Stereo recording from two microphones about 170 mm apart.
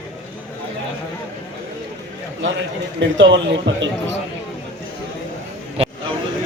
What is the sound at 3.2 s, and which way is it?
Speech, 90° right.